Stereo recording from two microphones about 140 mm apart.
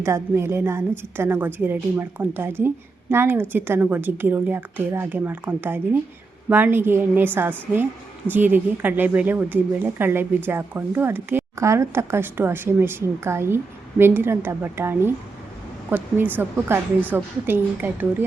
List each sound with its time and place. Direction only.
0.0 s a woman's voice: 20° right (ahead or behind)